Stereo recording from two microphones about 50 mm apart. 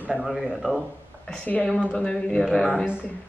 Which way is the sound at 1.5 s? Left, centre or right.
Left.